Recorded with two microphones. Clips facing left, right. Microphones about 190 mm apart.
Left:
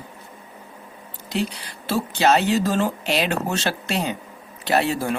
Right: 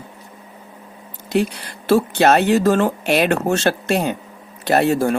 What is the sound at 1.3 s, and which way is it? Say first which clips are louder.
Speech: right 6 dB; 55° right (ahead or behind).